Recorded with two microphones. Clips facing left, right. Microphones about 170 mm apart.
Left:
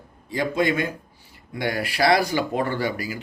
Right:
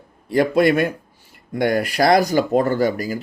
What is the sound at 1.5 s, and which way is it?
Speech, 50° right (ahead or behind).